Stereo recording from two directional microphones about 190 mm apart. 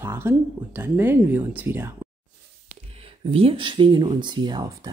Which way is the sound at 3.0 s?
30° right (ahead or behind).